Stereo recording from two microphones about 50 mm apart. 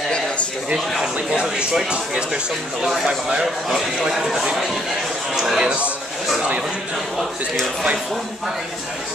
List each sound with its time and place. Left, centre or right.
1.3 s a man's voice: centre
3.6 s speech: centre
5.6 s a man's voice: right